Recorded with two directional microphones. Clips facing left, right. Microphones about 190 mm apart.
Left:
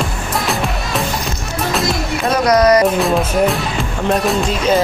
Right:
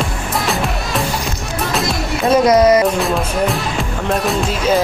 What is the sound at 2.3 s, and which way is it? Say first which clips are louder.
Speech: right 1 dB; 25° right (ahead or behind).